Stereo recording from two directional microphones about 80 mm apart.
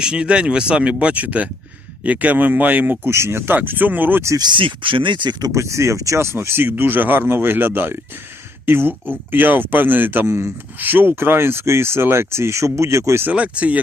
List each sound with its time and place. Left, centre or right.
0.0 s speech: centre
4.4 s speech: right
5.5 s speech: right
13.2 s speech: centre